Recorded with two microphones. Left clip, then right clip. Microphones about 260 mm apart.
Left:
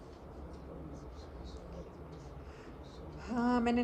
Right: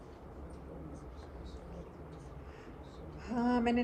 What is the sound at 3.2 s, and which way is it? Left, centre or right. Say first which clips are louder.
Speech: even; centre.